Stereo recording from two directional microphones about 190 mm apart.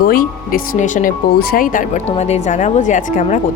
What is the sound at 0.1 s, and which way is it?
Speech, 50° left (ahead or behind).